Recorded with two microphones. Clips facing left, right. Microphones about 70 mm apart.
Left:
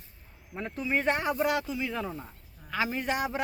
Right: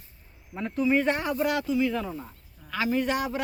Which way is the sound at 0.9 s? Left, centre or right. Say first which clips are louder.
Right 3 dB; left.